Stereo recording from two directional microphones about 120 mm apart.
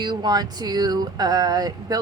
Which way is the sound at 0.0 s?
35° right (ahead or behind).